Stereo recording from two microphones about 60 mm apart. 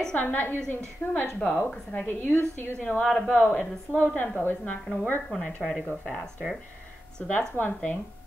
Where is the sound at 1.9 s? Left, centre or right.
Left.